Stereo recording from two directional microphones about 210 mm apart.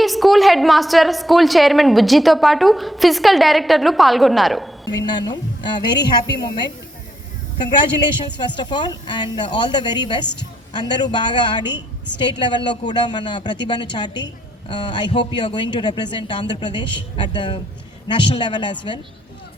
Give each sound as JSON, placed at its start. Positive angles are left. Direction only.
{"t": 0.0, "sound": "a woman's voice", "side_deg": 0}
{"t": 4.9, "sound": "speech", "side_deg": 20}
{"t": 7.7, "sound": "speech", "side_deg": 20}